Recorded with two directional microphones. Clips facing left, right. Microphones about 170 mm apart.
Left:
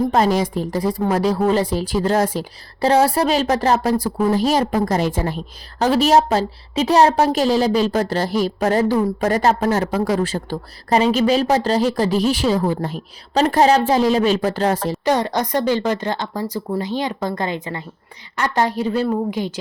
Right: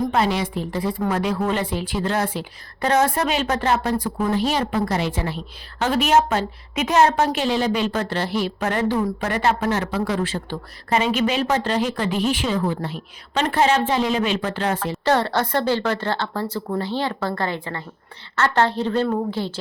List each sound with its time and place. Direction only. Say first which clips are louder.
0.1 s a woman's voice: left 4 dB; 40° left (ahead or behind)
15.0 s a woman's voice: even; 15° left (ahead or behind)